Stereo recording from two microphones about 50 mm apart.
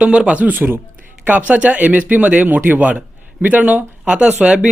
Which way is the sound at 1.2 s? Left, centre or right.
Right.